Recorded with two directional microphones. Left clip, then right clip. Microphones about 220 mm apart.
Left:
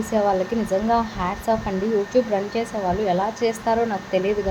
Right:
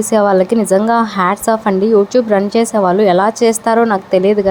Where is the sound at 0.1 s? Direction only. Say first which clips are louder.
Right 9 dB; 30° right (ahead or behind).